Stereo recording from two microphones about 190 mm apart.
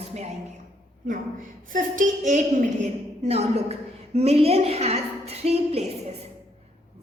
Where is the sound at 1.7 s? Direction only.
40° right (ahead or behind).